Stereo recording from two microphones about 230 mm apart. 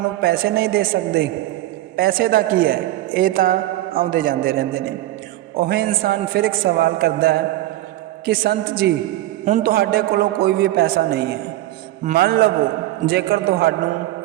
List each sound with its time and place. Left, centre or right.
0.2 s a man's voice: right